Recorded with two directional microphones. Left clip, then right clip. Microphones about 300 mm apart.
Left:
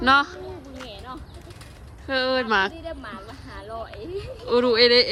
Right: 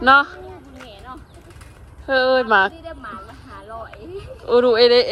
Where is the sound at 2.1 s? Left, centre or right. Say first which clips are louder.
Right 7 dB; centre.